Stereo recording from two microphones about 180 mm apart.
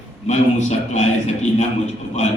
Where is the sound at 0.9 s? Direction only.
40° left (ahead or behind).